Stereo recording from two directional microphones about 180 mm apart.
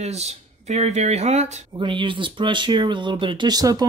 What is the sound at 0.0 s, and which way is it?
Speech, 35° right (ahead or behind).